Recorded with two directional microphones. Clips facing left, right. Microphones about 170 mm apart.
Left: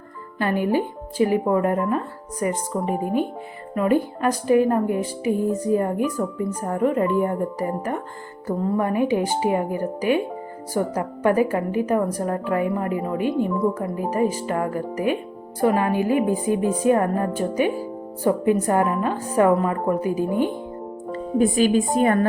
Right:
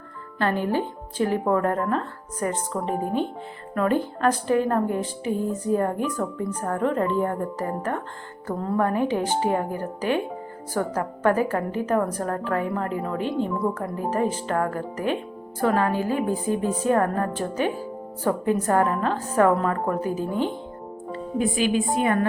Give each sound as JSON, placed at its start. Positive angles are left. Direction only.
{"t": 0.3, "sound": "speech", "side_deg": 10}
{"t": 21.1, "sound": "a woman's voice", "side_deg": 45}